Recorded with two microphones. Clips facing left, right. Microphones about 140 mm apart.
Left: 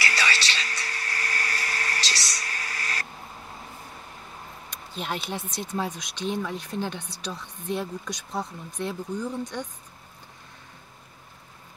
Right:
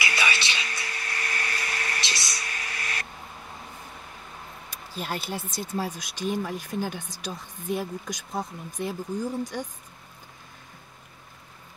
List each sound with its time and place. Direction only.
0.2 s whispering: 15° right (ahead or behind)
0.8 s a sound: 35° left (ahead or behind)
4.6 s speech: 5° right (ahead or behind)